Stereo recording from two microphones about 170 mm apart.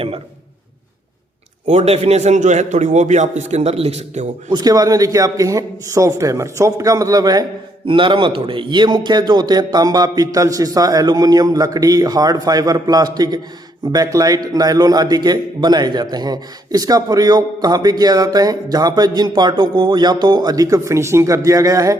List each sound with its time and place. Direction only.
1.6 s a man's voice: 40° right (ahead or behind)
4.5 s a man's voice: 20° right (ahead or behind)